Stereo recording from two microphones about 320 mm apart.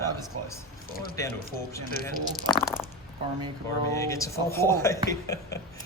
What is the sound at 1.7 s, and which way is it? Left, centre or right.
Speech, centre.